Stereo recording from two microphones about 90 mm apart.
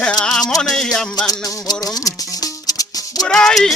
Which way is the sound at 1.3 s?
40° left (ahead or behind).